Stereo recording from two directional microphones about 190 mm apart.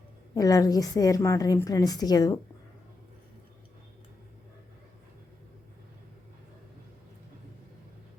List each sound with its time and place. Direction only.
0.3 s a woman's voice: 20° left (ahead or behind)